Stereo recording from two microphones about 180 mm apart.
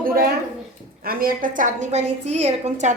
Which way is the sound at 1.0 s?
55° right (ahead or behind).